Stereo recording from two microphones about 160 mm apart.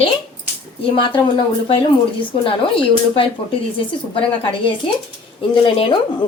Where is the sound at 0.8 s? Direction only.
30° left (ahead or behind).